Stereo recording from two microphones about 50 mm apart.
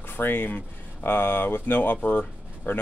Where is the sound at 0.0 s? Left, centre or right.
Left.